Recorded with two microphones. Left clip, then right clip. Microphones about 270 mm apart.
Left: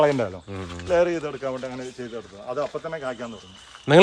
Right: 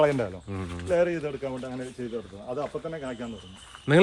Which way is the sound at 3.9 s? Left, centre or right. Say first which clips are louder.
Left 6 dB; centre.